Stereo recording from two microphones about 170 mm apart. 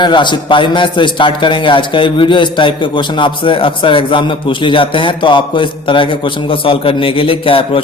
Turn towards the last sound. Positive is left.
turn(degrees=30)  # may be behind; listen again after turning